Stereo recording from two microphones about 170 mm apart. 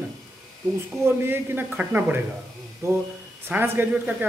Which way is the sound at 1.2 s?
15° right (ahead or behind).